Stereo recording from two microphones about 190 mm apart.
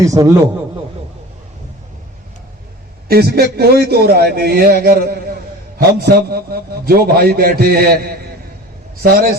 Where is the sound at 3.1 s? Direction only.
55° right (ahead or behind).